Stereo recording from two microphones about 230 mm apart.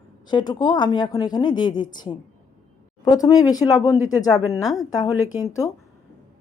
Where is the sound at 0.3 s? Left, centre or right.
Centre.